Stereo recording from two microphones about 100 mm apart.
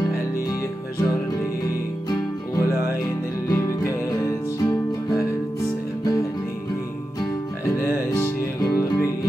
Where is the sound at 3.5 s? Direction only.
30° left (ahead or behind).